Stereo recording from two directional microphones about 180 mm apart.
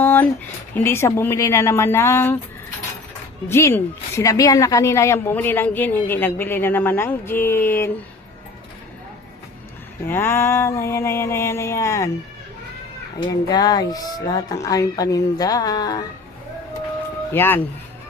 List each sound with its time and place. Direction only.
0.0 s a sound: 10° left (ahead or behind)
0.7 s speech: 10° left (ahead or behind)
3.5 s speech: 15° left (ahead or behind)
10.1 s speech: 15° left (ahead or behind)
13.5 s speech: 20° left (ahead or behind)
17.3 s speech: 10° left (ahead or behind)